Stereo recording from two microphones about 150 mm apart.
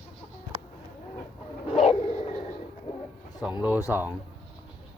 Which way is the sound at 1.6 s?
45° left (ahead or behind).